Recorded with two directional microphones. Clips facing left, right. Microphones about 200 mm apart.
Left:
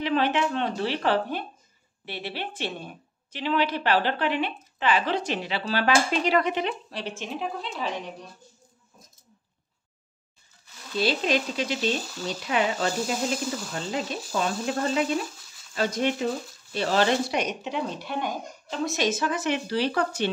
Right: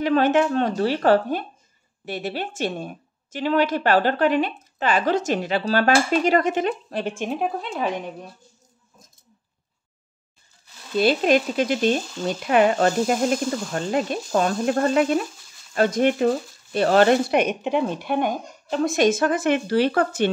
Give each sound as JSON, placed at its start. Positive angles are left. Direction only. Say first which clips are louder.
{"t": 0.0, "sound": "a woman's voice", "louder": "right 6 dB", "side_deg": -45}
{"t": 11.0, "sound": "a woman's voice", "louder": "right 6 dB", "side_deg": -55}